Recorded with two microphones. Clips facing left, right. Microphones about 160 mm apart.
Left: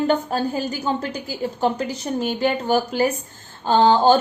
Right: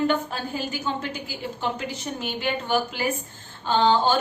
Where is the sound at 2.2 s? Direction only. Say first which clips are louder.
Left 7 dB; 40° left (ahead or behind).